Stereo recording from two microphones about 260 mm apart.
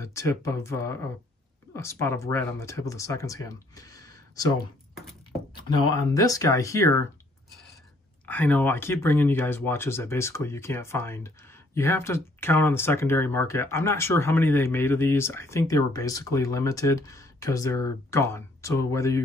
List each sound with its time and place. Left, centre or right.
0.0 s speech: centre
5.5 s a sound: centre
5.9 s speech: centre
8.3 s speech: centre